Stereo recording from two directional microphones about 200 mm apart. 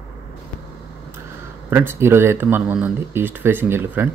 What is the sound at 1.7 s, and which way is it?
Speech, 10° right (ahead or behind).